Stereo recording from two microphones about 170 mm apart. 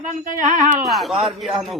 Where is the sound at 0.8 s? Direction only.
Centre (ahead or behind).